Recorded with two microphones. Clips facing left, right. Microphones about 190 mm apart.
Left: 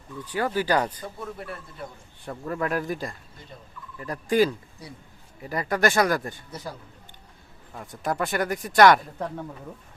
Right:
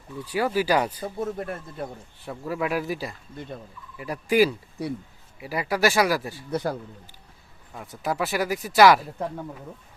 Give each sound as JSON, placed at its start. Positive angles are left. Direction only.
{"t": 0.2, "sound": "speech", "side_deg": -10}
{"t": 1.2, "sound": "a man's voice", "side_deg": -45}
{"t": 2.2, "sound": "speech", "side_deg": -5}
{"t": 6.5, "sound": "speech", "side_deg": -65}
{"t": 7.7, "sound": "speech", "side_deg": -5}